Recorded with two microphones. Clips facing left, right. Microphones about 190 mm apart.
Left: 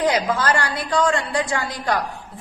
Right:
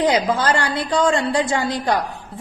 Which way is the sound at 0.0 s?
25° right (ahead or behind).